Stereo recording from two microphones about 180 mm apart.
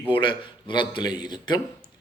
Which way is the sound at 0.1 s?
25° left (ahead or behind).